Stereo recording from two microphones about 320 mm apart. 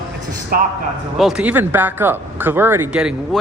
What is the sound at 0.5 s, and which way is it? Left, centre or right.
Speech, right.